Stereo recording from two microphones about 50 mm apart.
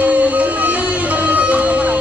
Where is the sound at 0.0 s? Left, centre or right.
Right.